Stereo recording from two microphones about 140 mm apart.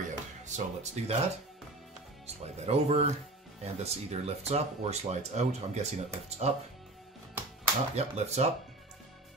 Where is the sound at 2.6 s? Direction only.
50° right (ahead or behind).